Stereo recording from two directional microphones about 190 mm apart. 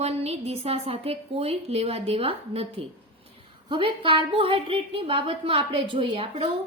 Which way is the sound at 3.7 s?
25° right (ahead or behind).